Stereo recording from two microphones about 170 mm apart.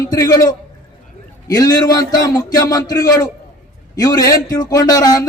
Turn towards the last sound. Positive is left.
turn(degrees=20)  # may be behind; listen again after turning